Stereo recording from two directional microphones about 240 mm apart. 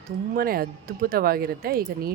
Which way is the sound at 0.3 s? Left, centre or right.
Right.